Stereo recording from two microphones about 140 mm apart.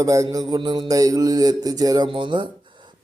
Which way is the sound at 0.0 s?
25° right (ahead or behind).